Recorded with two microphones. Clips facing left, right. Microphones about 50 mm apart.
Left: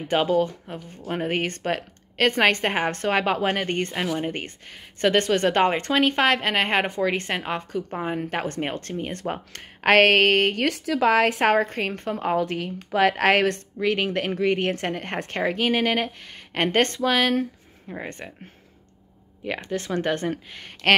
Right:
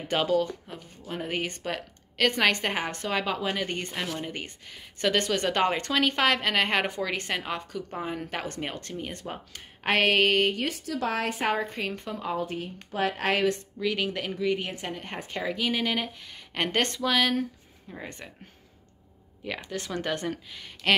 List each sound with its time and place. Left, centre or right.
0.1 s speech: left
1.1 s speech: left
2.9 s a woman's voice: left
9.1 s a woman's voice: left
10.6 s a woman's voice: left
12.4 s speech: left
13.7 s speech: left
19.6 s speech: left